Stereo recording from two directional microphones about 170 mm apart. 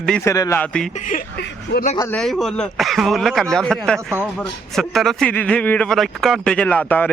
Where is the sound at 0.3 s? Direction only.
20° left (ahead or behind).